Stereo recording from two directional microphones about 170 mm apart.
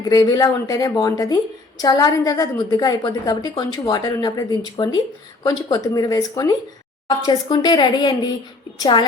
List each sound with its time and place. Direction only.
0.0 s a woman's voice: 20° left (ahead or behind)